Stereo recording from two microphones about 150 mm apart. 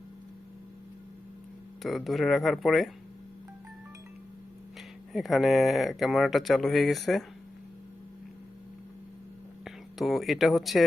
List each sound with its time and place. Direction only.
1.8 s speech: centre (ahead or behind)
5.1 s speech: centre (ahead or behind)
9.6 s speech: centre (ahead or behind)